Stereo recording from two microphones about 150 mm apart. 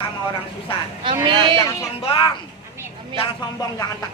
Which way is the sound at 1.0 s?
35° right (ahead or behind).